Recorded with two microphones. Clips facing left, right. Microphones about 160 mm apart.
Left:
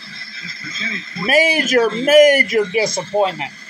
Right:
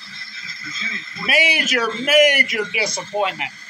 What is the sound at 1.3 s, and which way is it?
A man's voice, 45° left (ahead or behind).